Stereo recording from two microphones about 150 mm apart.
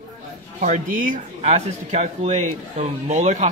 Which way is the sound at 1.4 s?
45° right (ahead or behind).